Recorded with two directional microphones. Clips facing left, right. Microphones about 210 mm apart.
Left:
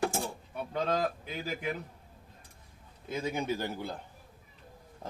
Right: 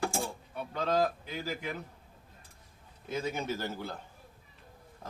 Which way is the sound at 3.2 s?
15° left (ahead or behind).